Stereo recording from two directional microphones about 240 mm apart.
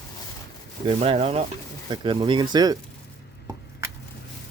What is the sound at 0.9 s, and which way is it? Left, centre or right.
Speech, right.